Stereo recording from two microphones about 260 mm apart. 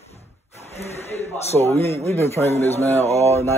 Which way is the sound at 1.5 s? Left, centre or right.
Centre.